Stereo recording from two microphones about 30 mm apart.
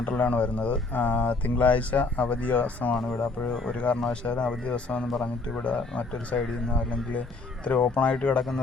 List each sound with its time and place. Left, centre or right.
0.3 s speech: left
0.9 s speech: left
1.5 s speech: left
3.7 s speech: left
7.6 s speech: left
8.4 s speech: left